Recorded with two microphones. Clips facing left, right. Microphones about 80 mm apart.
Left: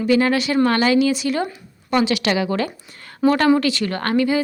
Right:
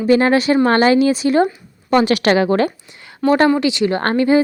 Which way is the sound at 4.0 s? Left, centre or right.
Right.